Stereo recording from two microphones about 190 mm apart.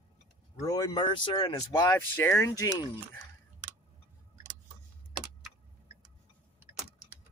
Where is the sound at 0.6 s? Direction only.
20° left (ahead or behind).